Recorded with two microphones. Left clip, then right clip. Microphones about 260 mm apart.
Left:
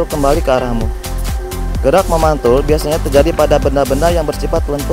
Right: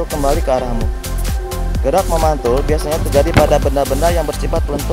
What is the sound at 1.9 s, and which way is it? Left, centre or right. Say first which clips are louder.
Speech: left 3 dB; left.